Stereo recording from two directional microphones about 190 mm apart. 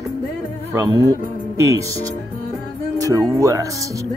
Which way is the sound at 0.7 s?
20° right (ahead or behind).